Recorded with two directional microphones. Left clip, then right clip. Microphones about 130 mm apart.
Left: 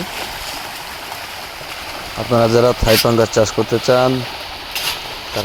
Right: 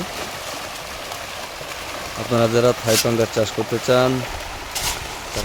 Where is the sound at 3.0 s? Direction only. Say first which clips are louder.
Left 6 dB; 5° right (ahead or behind).